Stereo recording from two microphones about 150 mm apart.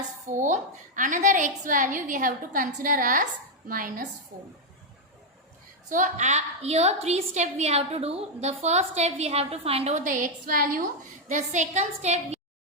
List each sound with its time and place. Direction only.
0.3 s a woman's voice: 55° right (ahead or behind)
5.9 s a woman's voice: 55° right (ahead or behind); by 10.8 s 75° right (ahead or behind)
11.3 s a woman's voice: 55° right (ahead or behind)